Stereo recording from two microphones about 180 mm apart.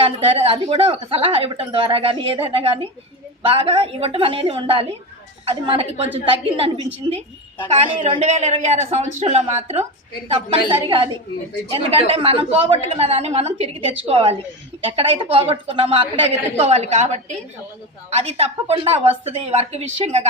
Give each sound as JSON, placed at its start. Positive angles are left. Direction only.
{"t": 0.0, "sound": "speech", "side_deg": -30}